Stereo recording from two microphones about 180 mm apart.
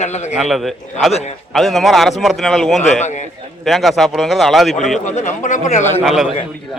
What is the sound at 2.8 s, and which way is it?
Speech, 40° left (ahead or behind).